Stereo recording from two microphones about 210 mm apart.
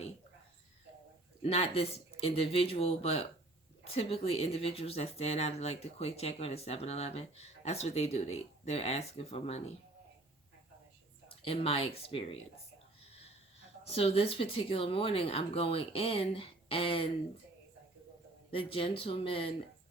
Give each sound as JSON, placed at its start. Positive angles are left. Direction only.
{"t": 1.4, "sound": "speech", "side_deg": 30}
{"t": 11.4, "sound": "speech", "side_deg": 25}
{"t": 13.1, "sound": "wheeze", "side_deg": 30}
{"t": 13.8, "sound": "speech", "side_deg": 30}
{"t": 18.5, "sound": "speech", "side_deg": 25}